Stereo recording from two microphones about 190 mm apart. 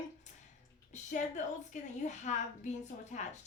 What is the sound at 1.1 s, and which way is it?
A woman's voice, 40° left (ahead or behind).